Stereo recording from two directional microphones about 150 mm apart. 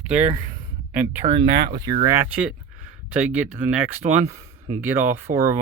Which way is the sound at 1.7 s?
30° right (ahead or behind).